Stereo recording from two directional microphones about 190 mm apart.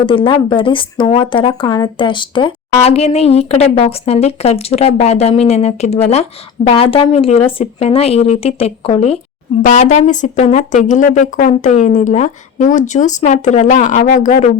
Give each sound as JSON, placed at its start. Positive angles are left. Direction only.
{"t": 0.0, "sound": "speech", "side_deg": 25}